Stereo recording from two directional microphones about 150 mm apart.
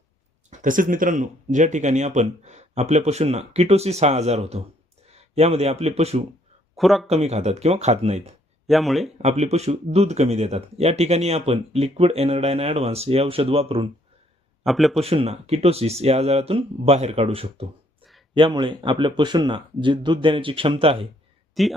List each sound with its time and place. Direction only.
0.6 s speech: 65° right (ahead or behind); by 6.2 s 45° right (ahead or behind)
6.7 s speech: centre (ahead or behind)
7.1 s speech: 45° right (ahead or behind)
8.6 s speech: centre (ahead or behind)
9.1 s speech: 45° right (ahead or behind)
14.6 s a man's voice: centre (ahead or behind)
14.9 s a man's voice: 40° right (ahead or behind)
21.6 s speech: centre (ahead or behind)